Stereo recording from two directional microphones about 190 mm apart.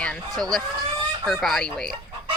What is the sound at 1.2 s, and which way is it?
Speech, centre (ahead or behind).